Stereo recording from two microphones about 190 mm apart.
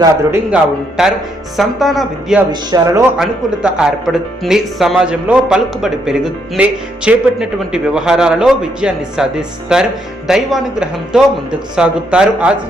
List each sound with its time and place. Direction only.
0.0 s a man's voice: 15° right (ahead or behind)
1.0 s speech: centre (ahead or behind)
2.5 s speech: 20° right (ahead or behind)
3.2 s speech: 5° right (ahead or behind)